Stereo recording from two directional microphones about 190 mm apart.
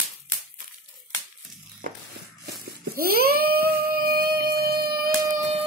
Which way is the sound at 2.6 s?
55° right (ahead or behind).